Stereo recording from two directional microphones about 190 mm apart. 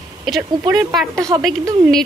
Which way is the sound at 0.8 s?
20° right (ahead or behind).